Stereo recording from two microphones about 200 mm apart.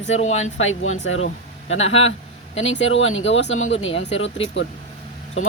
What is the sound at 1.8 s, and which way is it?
Speech, 30° left (ahead or behind).